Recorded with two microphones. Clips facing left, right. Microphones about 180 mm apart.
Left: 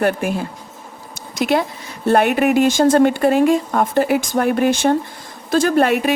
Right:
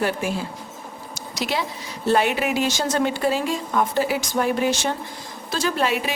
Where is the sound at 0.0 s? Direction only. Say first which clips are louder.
Left 5 dB; 55° left (ahead or behind).